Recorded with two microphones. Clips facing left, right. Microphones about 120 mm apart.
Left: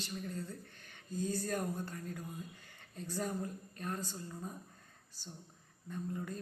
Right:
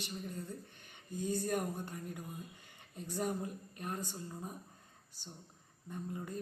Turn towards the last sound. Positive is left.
turn(degrees=-20)  # may be behind; listen again after turning